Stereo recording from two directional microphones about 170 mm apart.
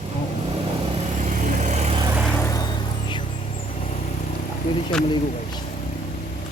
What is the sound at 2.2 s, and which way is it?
Vehicle, 15° left (ahead or behind).